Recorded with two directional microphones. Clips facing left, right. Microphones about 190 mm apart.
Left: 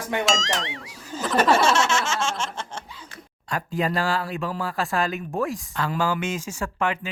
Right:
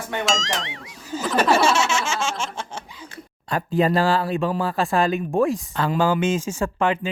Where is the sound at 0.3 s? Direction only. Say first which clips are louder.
Even; centre (ahead or behind).